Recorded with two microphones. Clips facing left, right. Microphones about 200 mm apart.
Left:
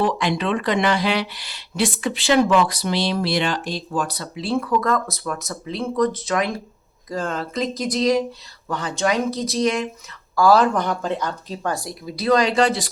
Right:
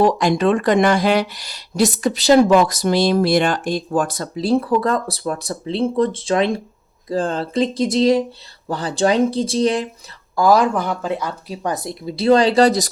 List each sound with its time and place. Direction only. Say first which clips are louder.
0.0 s speech: right 6 dB; 45° right (ahead or behind)
10.3 s speech: right 1 dB; 15° right (ahead or behind); by 12.9 s 40° right (ahead or behind)